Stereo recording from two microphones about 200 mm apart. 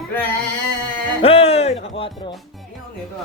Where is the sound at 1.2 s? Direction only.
30° left (ahead or behind).